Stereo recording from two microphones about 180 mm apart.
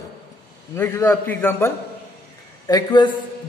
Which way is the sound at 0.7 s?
15° left (ahead or behind).